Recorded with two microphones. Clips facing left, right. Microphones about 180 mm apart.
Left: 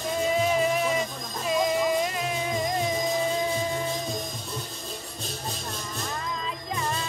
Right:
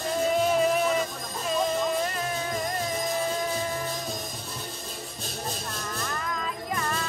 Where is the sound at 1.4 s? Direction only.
10° left (ahead or behind).